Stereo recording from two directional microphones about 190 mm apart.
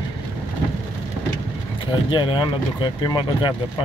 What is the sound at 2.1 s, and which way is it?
Speech, 25° left (ahead or behind).